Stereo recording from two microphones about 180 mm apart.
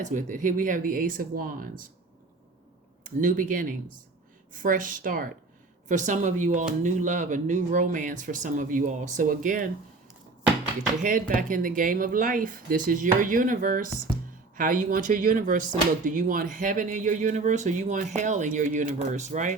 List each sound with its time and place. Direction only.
0.0 s speech: 45° right (ahead or behind)
3.0 s speech: 50° right (ahead or behind)
11.0 s speech: 45° right (ahead or behind)